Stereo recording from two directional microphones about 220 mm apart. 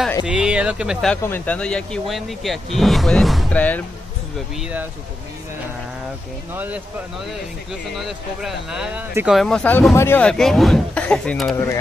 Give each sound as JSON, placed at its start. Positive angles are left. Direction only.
{"t": 0.3, "sound": "speech", "side_deg": -5}
{"t": 4.6, "sound": "speech", "side_deg": -5}
{"t": 6.5, "sound": "speech", "side_deg": -10}
{"t": 7.9, "sound": "speech", "side_deg": 0}